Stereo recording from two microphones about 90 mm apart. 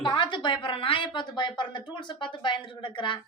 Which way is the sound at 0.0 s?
60° left (ahead or behind).